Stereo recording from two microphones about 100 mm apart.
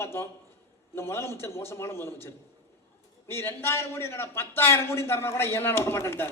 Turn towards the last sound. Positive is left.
turn(degrees=25)  # may be behind; listen again after turning